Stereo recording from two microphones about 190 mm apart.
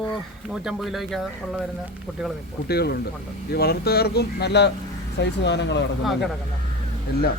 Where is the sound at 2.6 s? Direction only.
55° left (ahead or behind).